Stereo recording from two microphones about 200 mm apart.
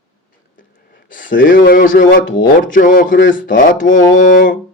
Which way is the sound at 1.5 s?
40° left (ahead or behind).